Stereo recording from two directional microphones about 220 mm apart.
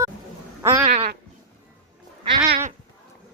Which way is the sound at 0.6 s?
10° right (ahead or behind).